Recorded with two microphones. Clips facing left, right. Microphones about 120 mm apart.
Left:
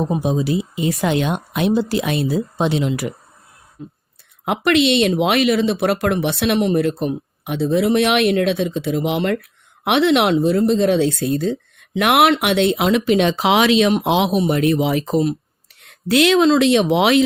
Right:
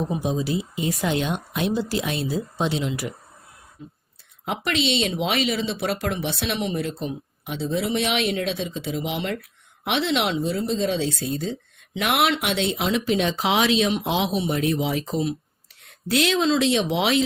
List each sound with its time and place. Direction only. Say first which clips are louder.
0.0 s speech: left 5 dB; 65° left (ahead or behind)
4.4 s speech: left 9 dB; 65° left (ahead or behind)